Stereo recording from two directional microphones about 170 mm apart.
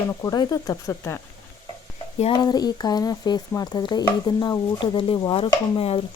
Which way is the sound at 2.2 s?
25° left (ahead or behind).